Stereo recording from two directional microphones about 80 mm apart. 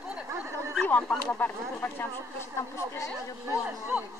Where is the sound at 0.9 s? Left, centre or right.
Centre; by 3.1 s left.